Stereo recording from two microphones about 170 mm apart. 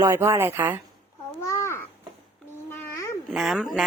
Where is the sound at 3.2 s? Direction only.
Centre (ahead or behind).